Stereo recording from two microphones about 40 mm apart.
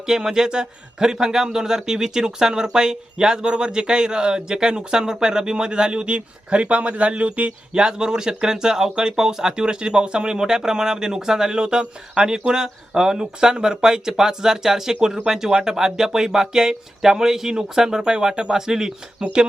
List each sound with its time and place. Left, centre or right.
0.0 s speech: centre; by 7.5 s right
7.7 s speech: centre